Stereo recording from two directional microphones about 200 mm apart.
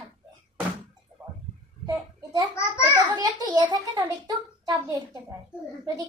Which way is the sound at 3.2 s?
20° right (ahead or behind).